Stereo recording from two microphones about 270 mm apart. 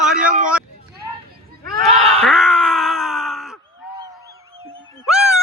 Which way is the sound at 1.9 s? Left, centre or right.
Right.